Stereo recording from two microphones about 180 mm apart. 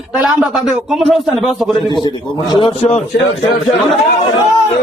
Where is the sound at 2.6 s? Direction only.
35° left (ahead or behind).